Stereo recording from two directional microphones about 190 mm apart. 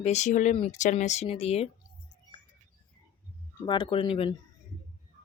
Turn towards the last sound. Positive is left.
turn(degrees=30)  # may be behind; listen again after turning